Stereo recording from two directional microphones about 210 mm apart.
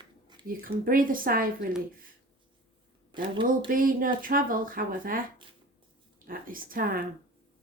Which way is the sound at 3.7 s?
40° right (ahead or behind).